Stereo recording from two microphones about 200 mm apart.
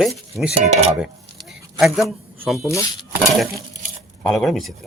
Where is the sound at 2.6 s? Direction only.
15° left (ahead or behind).